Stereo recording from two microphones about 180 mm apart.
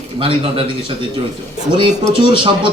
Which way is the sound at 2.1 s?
25° right (ahead or behind).